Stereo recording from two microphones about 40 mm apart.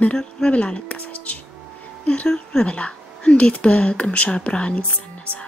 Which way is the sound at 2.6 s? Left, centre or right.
Left.